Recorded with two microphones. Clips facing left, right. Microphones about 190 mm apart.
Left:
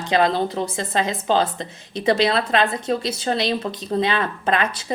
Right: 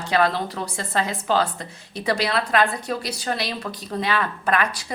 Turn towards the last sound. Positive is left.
turn(degrees=25)  # may be behind; listen again after turning